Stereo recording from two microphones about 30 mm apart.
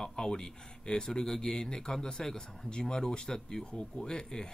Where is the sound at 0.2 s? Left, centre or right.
Centre.